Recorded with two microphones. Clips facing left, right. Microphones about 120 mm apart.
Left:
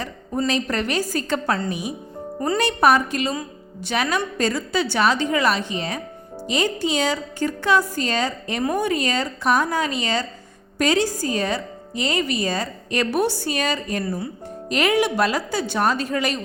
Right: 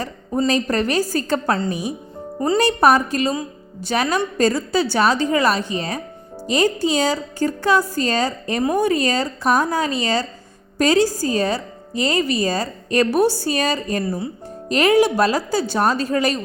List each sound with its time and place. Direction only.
0.0 s a woman's voice: 40° right (ahead or behind)